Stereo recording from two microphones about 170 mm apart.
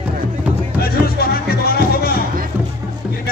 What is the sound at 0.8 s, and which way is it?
Music, 65° left (ahead or behind).